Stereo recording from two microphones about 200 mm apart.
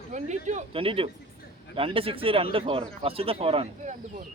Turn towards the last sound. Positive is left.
turn(degrees=-30)  # may be behind; listen again after turning